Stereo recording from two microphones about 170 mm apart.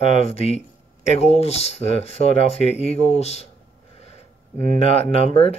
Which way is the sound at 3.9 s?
40° left (ahead or behind).